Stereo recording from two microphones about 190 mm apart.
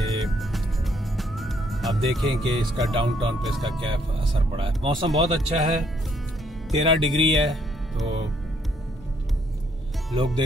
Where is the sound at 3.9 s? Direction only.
25° right (ahead or behind).